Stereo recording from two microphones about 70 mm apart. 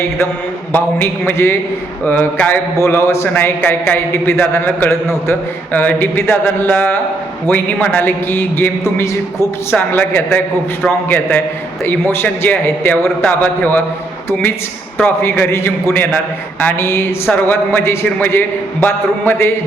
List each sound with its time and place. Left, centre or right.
1.2 s a man's voice: left
2.8 s a man's voice: left
9.7 s a woman's voice: left
15.0 s a man's voice: left